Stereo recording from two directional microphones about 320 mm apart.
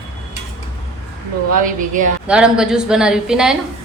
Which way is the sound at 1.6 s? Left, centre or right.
Right.